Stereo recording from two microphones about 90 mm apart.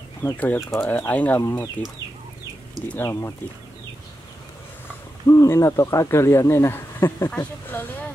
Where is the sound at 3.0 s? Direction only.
30° left (ahead or behind).